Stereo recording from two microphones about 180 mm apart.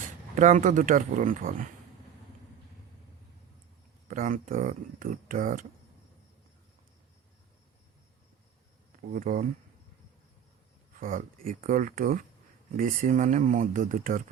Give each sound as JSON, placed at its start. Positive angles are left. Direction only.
{"t": 0.3, "sound": "speech", "side_deg": -45}
{"t": 4.1, "sound": "speech", "side_deg": -45}
{"t": 9.1, "sound": "speech", "side_deg": -50}
{"t": 11.0, "sound": "speech", "side_deg": -50}